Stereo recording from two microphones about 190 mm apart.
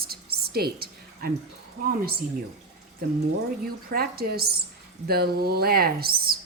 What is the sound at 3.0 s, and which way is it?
Speech, 50° right (ahead or behind).